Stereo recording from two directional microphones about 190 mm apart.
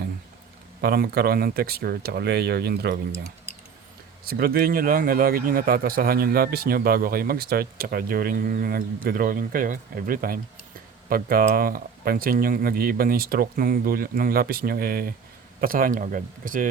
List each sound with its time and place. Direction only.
0.8 s speech: 55° right (ahead or behind)
4.2 s speech: 55° right (ahead or behind)